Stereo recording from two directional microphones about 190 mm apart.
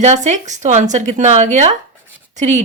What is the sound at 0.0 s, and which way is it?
Speech, 40° right (ahead or behind).